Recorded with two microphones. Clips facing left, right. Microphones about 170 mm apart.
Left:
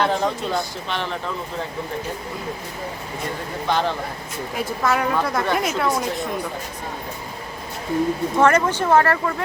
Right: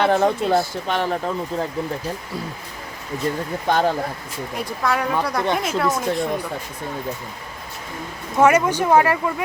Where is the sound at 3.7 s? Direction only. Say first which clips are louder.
Right 2 dB; 50° right (ahead or behind).